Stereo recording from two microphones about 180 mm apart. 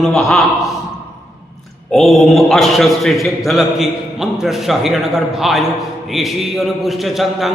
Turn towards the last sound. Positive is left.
turn(degrees=0)  # may be behind; listen again after turning